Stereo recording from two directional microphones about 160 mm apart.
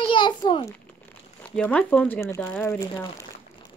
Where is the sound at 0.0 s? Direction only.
30° left (ahead or behind).